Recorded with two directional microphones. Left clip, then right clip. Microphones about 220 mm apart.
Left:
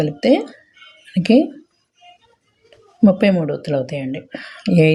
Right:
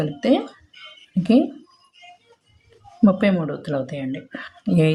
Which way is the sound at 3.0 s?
25° left (ahead or behind).